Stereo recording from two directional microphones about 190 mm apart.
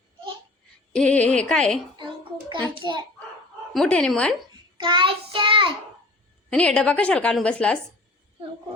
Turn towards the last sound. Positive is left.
turn(degrees=5)  # may be behind; listen again after turning